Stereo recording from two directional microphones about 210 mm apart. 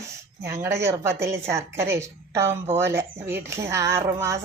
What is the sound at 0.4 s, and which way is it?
A woman's voice, 15° right (ahead or behind).